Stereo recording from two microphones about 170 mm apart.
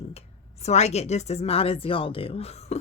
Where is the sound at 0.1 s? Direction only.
40° left (ahead or behind).